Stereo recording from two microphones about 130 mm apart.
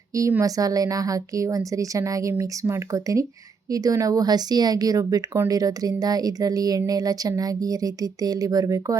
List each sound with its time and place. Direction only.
0.1 s speech: 20° right (ahead or behind)